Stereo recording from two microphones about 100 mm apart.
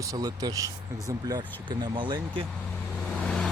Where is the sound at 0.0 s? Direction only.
35° right (ahead or behind).